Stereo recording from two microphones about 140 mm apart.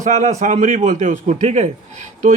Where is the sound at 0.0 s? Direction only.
55° right (ahead or behind).